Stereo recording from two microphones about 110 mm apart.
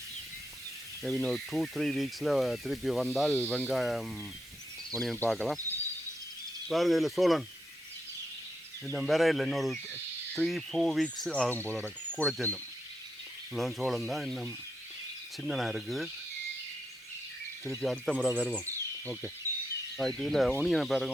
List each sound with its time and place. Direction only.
1.0 s speech: centre (ahead or behind)
3.3 s speech: 15° left (ahead or behind)
3.7 s speech: centre (ahead or behind)
6.7 s speech: centre (ahead or behind)
9.0 s speech: centre (ahead or behind)
11.8 s speech: 5° left (ahead or behind)
13.5 s speech: centre (ahead or behind)
15.4 s speech: centre (ahead or behind)
17.8 s speech: 10° left (ahead or behind)
18.5 s a sound: 15° left (ahead or behind)
20.0 s speech: 5° left (ahead or behind)